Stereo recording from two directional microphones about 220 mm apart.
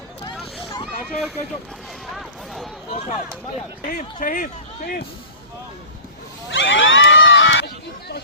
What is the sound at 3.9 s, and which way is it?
Speech, 40° left (ahead or behind).